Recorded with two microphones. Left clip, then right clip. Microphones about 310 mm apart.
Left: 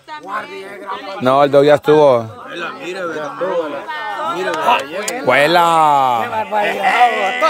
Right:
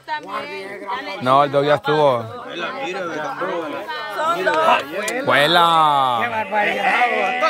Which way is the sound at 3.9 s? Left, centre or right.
Centre.